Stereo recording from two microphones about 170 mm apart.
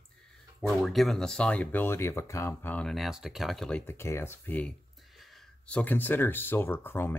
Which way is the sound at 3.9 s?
15° left (ahead or behind).